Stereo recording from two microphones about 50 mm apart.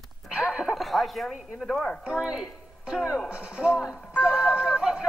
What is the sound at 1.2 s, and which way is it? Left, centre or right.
Speech, centre.